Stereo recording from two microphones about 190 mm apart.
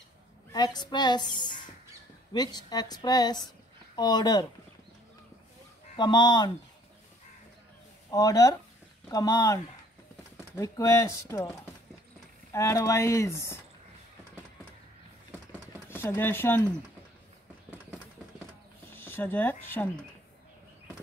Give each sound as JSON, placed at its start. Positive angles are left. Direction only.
{"t": 0.5, "sound": "a woman's voice", "side_deg": 20}
{"t": 5.9, "sound": "a woman's voice", "side_deg": 20}
{"t": 8.1, "sound": "a woman's voice", "side_deg": 20}
{"t": 15.9, "sound": "speech", "side_deg": 10}
{"t": 18.9, "sound": "speech", "side_deg": 10}